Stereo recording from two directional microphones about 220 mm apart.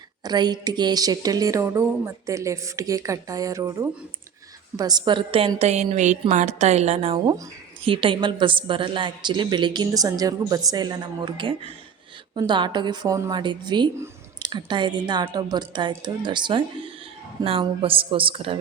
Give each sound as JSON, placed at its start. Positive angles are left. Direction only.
{"t": 0.3, "sound": "a woman's voice", "side_deg": -20}